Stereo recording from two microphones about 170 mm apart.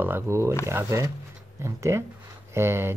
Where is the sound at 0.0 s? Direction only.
15° right (ahead or behind).